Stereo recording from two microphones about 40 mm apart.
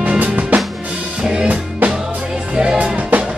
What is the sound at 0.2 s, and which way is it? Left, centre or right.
Music, right.